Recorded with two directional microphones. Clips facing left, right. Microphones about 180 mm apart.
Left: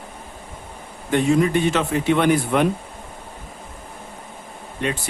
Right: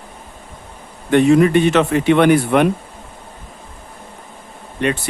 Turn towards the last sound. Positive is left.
turn(degrees=-70)  # may be behind; listen again after turning